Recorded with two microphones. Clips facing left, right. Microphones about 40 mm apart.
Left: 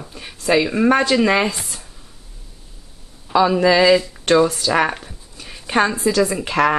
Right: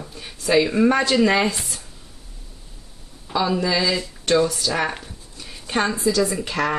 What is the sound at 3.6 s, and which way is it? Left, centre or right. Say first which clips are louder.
Speech: left 9 dB; left.